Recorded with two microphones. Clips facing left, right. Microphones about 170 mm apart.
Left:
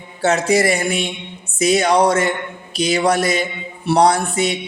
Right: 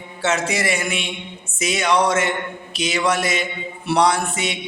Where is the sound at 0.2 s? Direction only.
35° left (ahead or behind).